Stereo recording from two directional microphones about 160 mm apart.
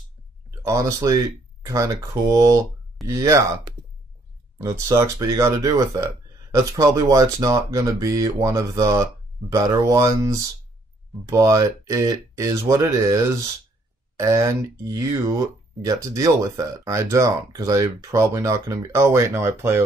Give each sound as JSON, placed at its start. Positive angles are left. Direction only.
{"t": 0.5, "sound": "speech", "side_deg": -20}
{"t": 4.6, "sound": "speech", "side_deg": -20}